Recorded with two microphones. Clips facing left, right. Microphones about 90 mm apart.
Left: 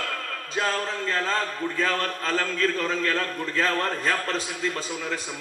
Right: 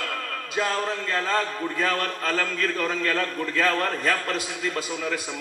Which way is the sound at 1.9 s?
35° left (ahead or behind).